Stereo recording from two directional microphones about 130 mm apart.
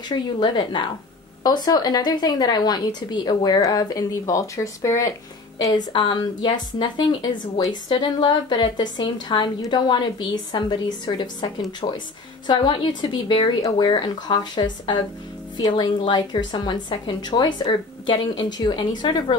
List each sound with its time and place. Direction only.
0.1 s a woman's voice: 35° left (ahead or behind)